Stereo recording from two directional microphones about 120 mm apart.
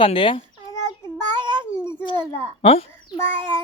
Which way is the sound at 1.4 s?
40° right (ahead or behind).